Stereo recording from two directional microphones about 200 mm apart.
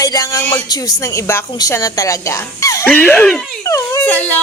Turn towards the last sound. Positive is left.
turn(degrees=10)  # may be behind; listen again after turning